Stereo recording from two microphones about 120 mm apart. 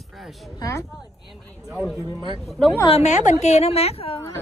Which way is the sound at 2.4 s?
Centre (ahead or behind).